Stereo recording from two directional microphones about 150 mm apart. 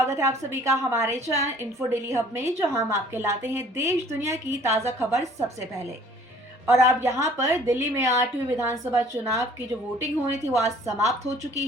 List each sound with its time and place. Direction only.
0.0 s a woman's voice: 20° right (ahead or behind)
6.7 s a woman's voice: 20° right (ahead or behind)